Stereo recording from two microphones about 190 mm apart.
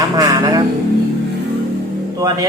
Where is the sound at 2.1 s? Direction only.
20° right (ahead or behind).